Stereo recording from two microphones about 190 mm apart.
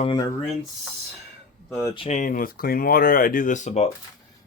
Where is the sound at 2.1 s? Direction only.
45° left (ahead or behind).